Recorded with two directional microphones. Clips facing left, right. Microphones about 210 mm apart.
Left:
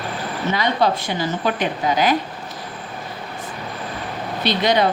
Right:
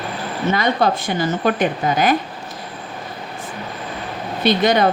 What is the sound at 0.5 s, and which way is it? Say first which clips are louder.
A woman's voice: right 1 dB; 50° right (ahead or behind).